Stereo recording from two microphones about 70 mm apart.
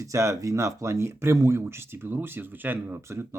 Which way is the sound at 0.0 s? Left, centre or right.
Right.